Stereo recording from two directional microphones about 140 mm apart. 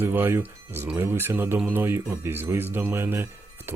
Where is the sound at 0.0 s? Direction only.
15° right (ahead or behind).